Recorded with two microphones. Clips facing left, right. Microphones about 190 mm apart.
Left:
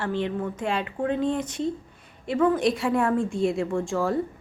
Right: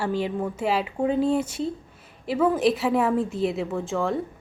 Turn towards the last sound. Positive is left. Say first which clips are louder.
# left 1 dB
turn(degrees=0)  # may be behind; listen again after turning